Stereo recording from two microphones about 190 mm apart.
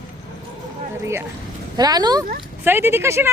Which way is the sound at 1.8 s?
20° right (ahead or behind).